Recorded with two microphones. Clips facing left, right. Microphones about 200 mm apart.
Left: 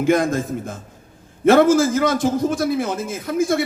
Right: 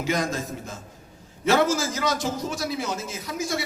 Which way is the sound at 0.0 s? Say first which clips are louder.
Left 9 dB; 55° left (ahead or behind).